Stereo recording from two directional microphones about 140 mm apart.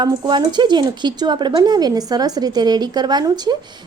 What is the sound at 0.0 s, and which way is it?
A woman's voice, 30° right (ahead or behind).